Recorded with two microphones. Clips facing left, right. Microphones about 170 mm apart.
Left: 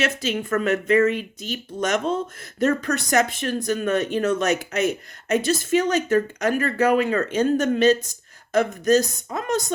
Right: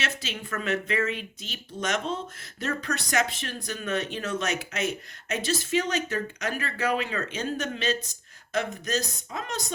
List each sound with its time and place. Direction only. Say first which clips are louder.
0.0 s speech: left 10 dB; 45° left (ahead or behind)